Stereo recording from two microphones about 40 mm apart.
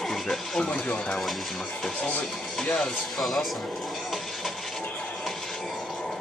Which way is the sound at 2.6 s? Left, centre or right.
Centre.